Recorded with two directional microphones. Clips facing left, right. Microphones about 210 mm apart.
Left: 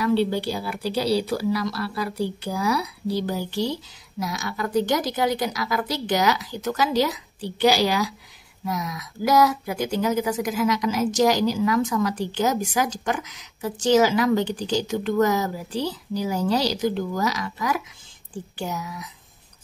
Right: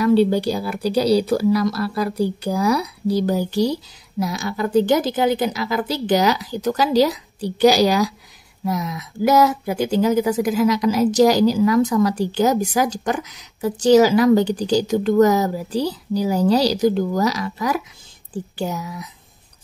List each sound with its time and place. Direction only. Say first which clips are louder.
0.0 s speech: right 6 dB; 45° right (ahead or behind)
8.6 s speech: right 5 dB; 30° right (ahead or behind)